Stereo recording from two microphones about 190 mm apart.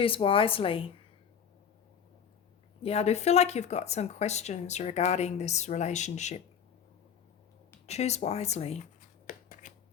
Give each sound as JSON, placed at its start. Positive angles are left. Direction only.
{"t": 0.0, "sound": "speech", "side_deg": 30}
{"t": 2.8, "sound": "speech", "side_deg": 35}
{"t": 7.9, "sound": "speech", "side_deg": 35}
{"t": 9.2, "sound": "a sound", "side_deg": 45}